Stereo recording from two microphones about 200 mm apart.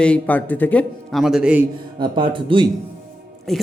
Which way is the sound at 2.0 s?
25° right (ahead or behind).